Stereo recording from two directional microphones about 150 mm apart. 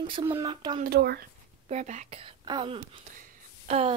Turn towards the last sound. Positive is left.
turn(degrees=-60)  # may be behind; listen again after turning